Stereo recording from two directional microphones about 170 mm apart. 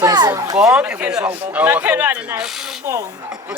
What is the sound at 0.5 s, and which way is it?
Speech, 5° right (ahead or behind).